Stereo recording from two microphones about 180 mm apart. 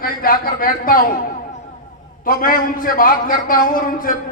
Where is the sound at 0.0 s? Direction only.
55° left (ahead or behind).